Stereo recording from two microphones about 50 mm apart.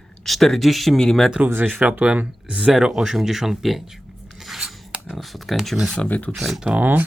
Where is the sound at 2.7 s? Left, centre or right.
Centre.